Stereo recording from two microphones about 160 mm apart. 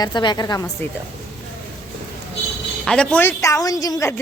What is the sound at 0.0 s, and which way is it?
Speech, 25° left (ahead or behind).